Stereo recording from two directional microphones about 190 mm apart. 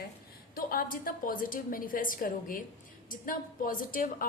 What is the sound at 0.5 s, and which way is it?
A woman's voice, 50° left (ahead or behind).